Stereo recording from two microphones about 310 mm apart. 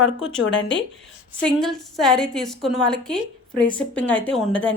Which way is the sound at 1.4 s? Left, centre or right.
Centre.